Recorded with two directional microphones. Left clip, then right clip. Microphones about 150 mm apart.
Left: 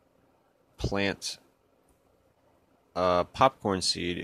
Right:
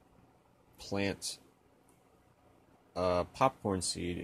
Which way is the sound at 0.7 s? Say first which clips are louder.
Left 6 dB; 40° left (ahead or behind).